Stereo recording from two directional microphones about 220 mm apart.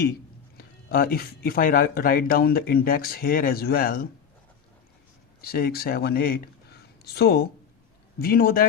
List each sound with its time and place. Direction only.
0.5 s speech: 40° left (ahead or behind)
5.4 s speech: 45° left (ahead or behind)